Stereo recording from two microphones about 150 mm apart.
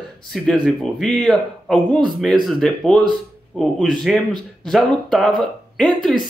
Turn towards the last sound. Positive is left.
turn(degrees=5)  # may be behind; listen again after turning